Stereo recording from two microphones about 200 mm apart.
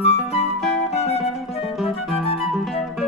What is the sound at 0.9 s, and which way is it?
Music, 30° left (ahead or behind).